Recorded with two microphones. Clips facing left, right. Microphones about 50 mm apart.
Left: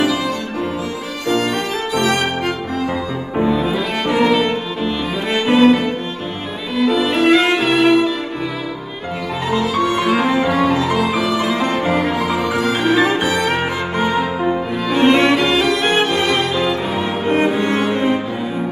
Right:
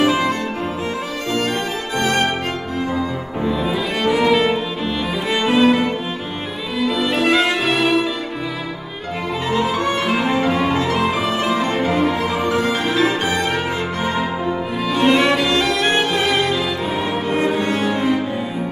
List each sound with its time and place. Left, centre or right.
0.0 s music: right
3.4 s cello: centre
4.3 s music: centre
6.8 s violin: centre
9.5 s music: right
12.8 s music: left
15.3 s music: centre
17.4 s cello: left